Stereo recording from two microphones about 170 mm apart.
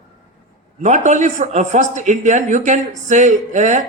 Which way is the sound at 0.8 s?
45° right (ahead or behind).